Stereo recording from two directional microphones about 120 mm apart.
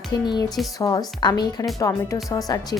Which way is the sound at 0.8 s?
30° left (ahead or behind).